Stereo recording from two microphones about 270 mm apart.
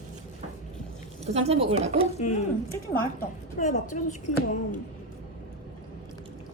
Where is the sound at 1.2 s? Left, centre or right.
Right.